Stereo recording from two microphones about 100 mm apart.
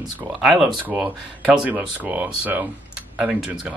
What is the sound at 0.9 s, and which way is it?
Speech, 15° right (ahead or behind).